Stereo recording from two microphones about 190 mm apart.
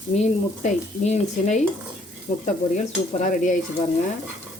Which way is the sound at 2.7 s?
40° left (ahead or behind).